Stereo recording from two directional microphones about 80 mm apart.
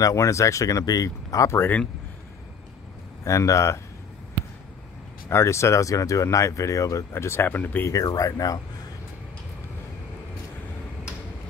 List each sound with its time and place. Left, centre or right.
0.0 s speech: left
3.3 s speech: left
5.3 s speech: left
7.1 s speech: left
7.9 s speech: left